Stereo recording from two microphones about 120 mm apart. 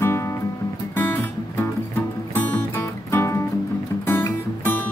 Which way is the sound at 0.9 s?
15° left (ahead or behind).